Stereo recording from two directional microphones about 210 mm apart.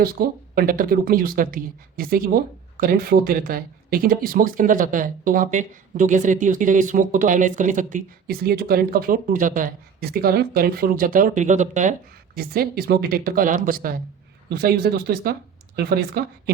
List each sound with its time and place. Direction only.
0.0 s speech: 45° right (ahead or behind)